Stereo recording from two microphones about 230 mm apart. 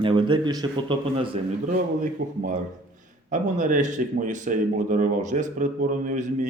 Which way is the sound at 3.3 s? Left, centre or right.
Right.